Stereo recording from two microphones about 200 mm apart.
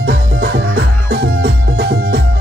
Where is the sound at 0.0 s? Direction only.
55° right (ahead or behind).